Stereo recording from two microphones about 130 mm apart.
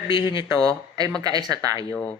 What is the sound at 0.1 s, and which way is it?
Speech, 40° left (ahead or behind).